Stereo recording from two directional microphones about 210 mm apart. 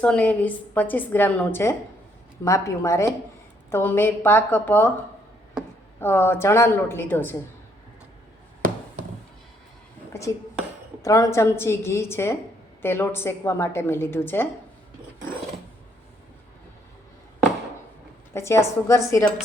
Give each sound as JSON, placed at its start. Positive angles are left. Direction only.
{"t": 0.0, "sound": "a woman's voice", "side_deg": 5}
{"t": 6.0, "sound": "a woman's voice", "side_deg": 10}
{"t": 10.1, "sound": "dishes", "side_deg": 15}
{"t": 11.0, "sound": "a woman's voice", "side_deg": 15}
{"t": 18.3, "sound": "a woman's voice", "side_deg": 15}